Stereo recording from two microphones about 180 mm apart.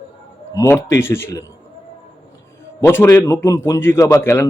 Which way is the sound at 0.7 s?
15° left (ahead or behind).